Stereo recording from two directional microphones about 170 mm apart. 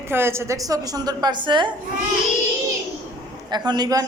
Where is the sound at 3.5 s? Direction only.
25° right (ahead or behind).